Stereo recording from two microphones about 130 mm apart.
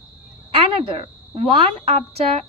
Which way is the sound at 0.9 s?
45° right (ahead or behind).